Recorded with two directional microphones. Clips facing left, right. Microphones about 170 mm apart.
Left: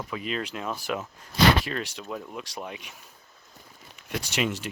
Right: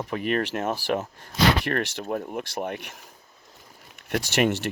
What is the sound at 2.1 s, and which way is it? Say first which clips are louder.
Speech: right 7 dB; 50° right (ahead or behind).